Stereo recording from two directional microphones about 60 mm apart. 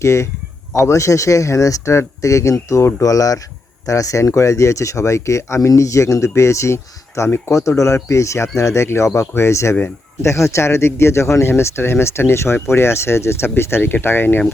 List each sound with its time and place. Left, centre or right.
0.0 s speech: left
3.8 s speech: left